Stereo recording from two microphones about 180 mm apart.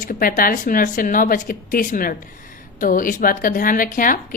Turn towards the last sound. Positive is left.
turn(degrees=50)  # may be behind; listen again after turning